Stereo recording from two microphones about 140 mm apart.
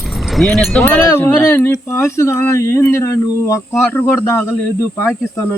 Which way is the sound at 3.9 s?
20° left (ahead or behind).